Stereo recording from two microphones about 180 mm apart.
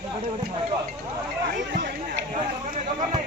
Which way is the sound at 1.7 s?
70° right (ahead or behind).